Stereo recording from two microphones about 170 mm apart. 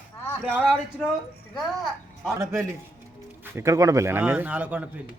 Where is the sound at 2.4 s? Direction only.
15° right (ahead or behind).